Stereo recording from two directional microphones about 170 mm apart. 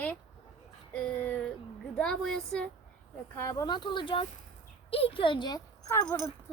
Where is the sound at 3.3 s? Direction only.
20° left (ahead or behind).